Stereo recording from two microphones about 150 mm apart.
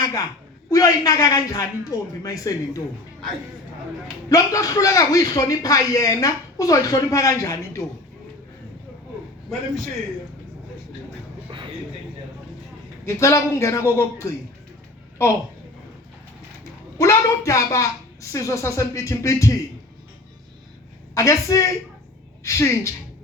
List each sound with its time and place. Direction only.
0.0 s a sound: 25° left (ahead or behind)
0.7 s a man's voice: 25° left (ahead or behind)
4.3 s a man's voice: 20° left (ahead or behind)
13.1 s a man's voice: 20° left (ahead or behind)
17.0 s a man's voice: 20° left (ahead or behind)
21.2 s a man's voice: 20° left (ahead or behind)